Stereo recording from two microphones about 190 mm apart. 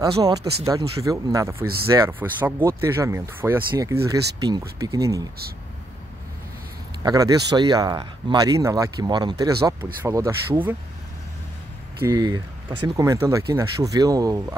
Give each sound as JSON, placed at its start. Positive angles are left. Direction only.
{"t": 0.0, "sound": "speech", "side_deg": -20}
{"t": 7.0, "sound": "speech", "side_deg": -20}
{"t": 12.0, "sound": "speech", "side_deg": -15}